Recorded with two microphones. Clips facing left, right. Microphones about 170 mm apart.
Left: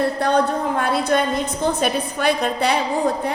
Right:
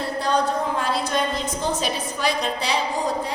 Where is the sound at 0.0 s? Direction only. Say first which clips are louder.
Left 4 dB; 60° left (ahead or behind).